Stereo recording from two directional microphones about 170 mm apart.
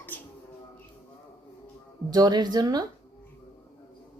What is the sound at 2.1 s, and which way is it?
Speech, 25° right (ahead or behind).